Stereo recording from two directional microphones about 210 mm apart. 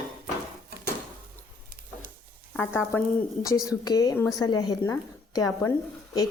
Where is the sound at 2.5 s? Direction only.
10° left (ahead or behind).